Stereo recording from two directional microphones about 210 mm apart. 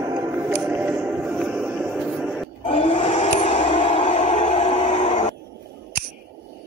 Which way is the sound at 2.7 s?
25° left (ahead or behind).